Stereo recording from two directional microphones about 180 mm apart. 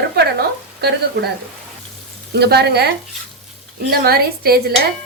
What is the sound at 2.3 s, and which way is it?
A woman's voice, 65° right (ahead or behind).